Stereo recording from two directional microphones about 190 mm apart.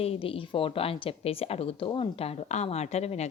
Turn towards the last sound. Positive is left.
turn(degrees=35)  # may be behind; listen again after turning